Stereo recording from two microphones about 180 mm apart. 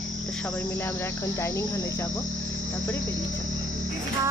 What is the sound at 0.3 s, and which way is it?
Cricket, 5° left (ahead or behind).